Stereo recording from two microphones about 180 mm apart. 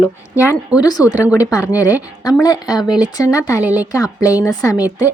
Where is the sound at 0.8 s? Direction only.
20° left (ahead or behind).